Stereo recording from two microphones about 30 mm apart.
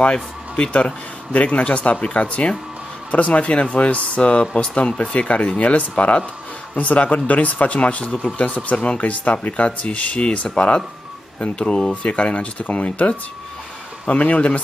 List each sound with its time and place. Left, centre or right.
0.0 s speech: left
1.3 s speech: left
11.9 s speech: left
14.1 s speech: left